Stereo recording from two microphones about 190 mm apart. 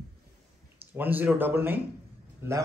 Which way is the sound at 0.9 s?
10° right (ahead or behind).